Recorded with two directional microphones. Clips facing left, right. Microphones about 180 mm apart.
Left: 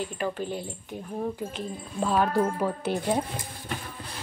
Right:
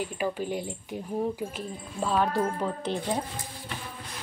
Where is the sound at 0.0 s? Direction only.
10° right (ahead or behind); by 3.0 s 5° left (ahead or behind).